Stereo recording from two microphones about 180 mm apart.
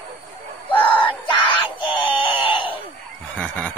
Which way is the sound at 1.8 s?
30° left (ahead or behind).